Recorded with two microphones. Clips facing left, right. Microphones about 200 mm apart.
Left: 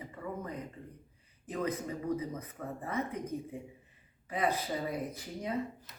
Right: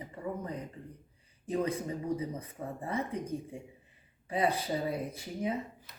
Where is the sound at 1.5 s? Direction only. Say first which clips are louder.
Right 3 dB; 30° right (ahead or behind).